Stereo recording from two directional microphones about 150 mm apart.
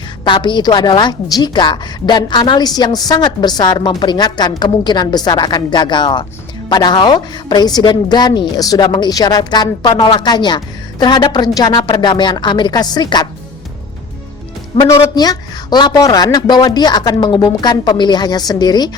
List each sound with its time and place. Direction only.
0.3 s a woman's voice: 30° left (ahead or behind)
14.7 s speech: 40° left (ahead or behind)
15.1 s a woman's voice: 25° left (ahead or behind)